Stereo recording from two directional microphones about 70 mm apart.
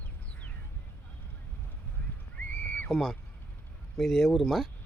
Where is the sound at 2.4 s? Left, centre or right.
Left.